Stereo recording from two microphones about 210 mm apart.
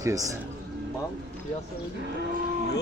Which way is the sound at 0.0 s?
15° right (ahead or behind).